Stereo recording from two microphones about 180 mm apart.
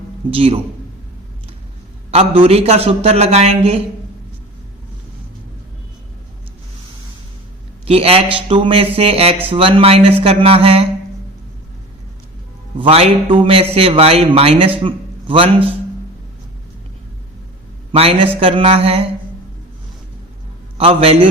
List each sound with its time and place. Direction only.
0.3 s a man's voice: 30° right (ahead or behind)
2.0 s a man's voice: 35° right (ahead or behind)
7.9 s a man's voice: 35° right (ahead or behind)
12.8 s a man's voice: 30° right (ahead or behind)
17.9 s a man's voice: 35° right (ahead or behind)
20.7 s a man's voice: 35° right (ahead or behind)